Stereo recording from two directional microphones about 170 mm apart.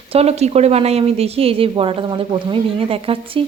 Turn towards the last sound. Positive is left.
turn(degrees=-35)  # may be behind; listen again after turning